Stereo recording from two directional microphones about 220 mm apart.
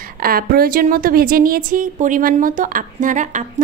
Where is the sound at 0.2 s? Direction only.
40° right (ahead or behind).